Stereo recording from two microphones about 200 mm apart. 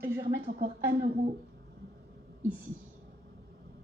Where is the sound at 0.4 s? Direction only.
40° right (ahead or behind).